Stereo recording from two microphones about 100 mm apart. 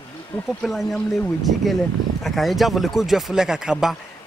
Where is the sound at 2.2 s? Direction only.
Centre (ahead or behind).